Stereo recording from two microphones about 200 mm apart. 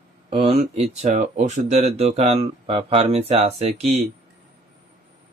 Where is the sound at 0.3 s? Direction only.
30° right (ahead or behind).